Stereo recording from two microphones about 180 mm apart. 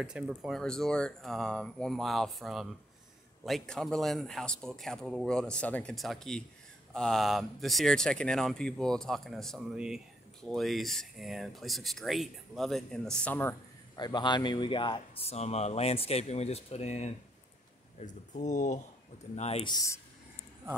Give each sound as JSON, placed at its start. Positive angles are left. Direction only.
{"t": 0.0, "sound": "speech", "side_deg": -5}
{"t": 13.9, "sound": "speech", "side_deg": 25}
{"t": 19.7, "sound": "speech", "side_deg": 20}